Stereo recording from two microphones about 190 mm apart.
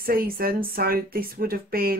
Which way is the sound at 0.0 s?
50° right (ahead or behind).